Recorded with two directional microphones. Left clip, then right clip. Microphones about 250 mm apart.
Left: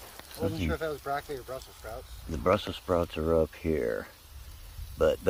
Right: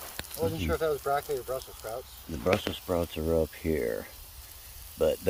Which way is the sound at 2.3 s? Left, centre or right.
Centre.